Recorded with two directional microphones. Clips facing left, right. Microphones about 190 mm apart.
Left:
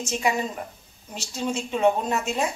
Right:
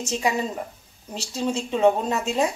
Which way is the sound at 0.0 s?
35° right (ahead or behind).